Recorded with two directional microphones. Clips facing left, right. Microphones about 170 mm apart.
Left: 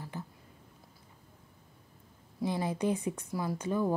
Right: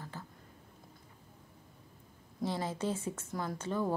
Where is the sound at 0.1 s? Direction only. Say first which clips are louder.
Left 9 dB; 15° left (ahead or behind).